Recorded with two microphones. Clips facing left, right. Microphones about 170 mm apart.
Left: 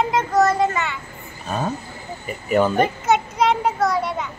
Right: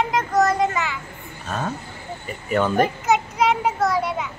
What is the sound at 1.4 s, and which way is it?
A child's voice, 10° left (ahead or behind).